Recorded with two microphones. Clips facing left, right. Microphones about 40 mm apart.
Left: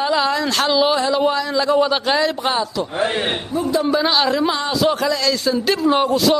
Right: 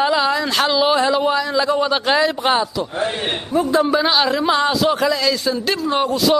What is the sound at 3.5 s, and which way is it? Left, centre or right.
Speech, right.